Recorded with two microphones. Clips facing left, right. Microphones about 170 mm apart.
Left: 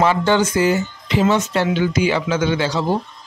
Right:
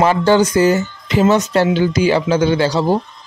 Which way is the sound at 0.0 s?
40° right (ahead or behind).